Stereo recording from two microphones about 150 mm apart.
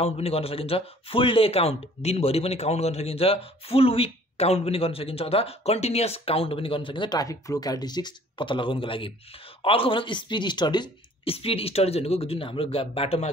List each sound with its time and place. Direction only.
0.0 s speech: 40° left (ahead or behind)